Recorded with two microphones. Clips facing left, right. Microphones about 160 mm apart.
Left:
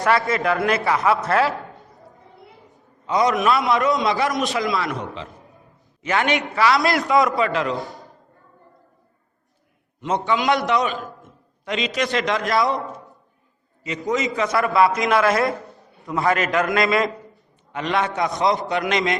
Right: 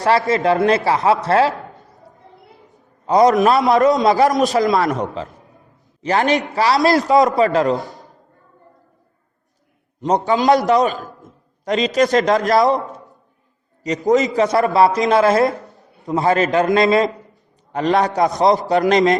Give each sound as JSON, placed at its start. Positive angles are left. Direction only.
{"t": 0.3, "sound": "speech", "side_deg": -25}
{"t": 3.1, "sound": "a man's voice", "side_deg": -45}
{"t": 7.8, "sound": "a man's voice", "side_deg": 0}
{"t": 10.0, "sound": "a man's voice", "side_deg": -40}
{"t": 13.8, "sound": "a man's voice", "side_deg": -40}
{"t": 17.7, "sound": "a man's voice", "side_deg": -40}